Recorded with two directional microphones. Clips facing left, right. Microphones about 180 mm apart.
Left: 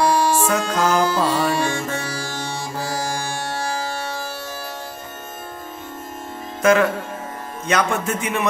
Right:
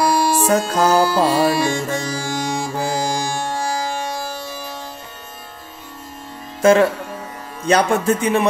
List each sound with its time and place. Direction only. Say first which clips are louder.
0.0 s music: right 1 dB; 10° right (ahead or behind)
0.5 s speech: right 4 dB; 40° right (ahead or behind)
1.5 s music: right 3 dB; 10° right (ahead or behind)
6.6 s music: right 3 dB; 30° right (ahead or behind)
7.6 s speech: right 5 dB; 35° right (ahead or behind)